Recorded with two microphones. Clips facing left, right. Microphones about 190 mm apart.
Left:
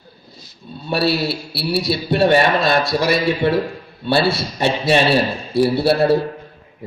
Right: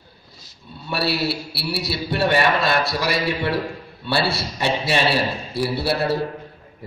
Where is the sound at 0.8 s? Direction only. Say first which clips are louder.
Left 4 dB; 20° left (ahead or behind).